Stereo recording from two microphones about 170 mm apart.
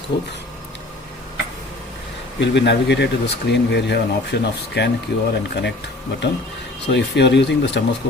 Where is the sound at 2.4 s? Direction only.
90° left.